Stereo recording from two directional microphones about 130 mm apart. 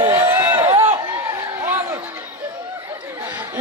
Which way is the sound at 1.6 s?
15° right (ahead or behind).